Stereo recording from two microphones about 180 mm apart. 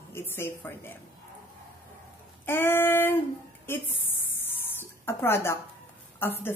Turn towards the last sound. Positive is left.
turn(degrees=10)  # may be behind; listen again after turning